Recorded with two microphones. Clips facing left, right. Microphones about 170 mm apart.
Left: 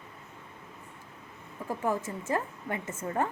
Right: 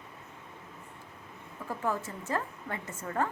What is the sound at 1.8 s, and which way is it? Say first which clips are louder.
A woman's voice: left 2 dB; 20° left (ahead or behind).